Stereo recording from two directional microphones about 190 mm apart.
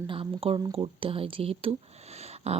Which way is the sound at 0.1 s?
30° right (ahead or behind).